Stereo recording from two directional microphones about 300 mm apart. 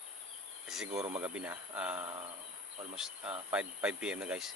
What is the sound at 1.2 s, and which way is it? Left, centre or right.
Speech, centre.